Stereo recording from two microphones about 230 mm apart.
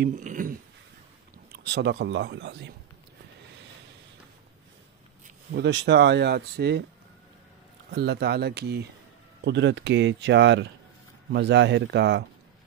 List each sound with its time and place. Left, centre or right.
0.0 s a sound: right
1.5 s speech: right
5.5 s speech: right
7.9 s speech: right